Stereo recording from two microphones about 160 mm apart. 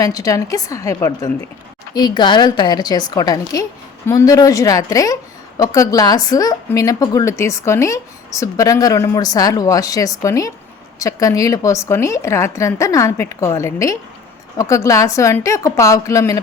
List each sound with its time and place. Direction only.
0.0 s a woman's voice: 20° left (ahead or behind)